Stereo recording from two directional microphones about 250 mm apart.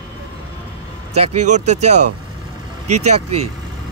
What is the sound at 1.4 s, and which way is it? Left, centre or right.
Speech, right.